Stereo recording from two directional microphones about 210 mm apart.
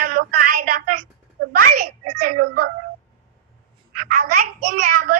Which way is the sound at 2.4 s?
45° right (ahead or behind).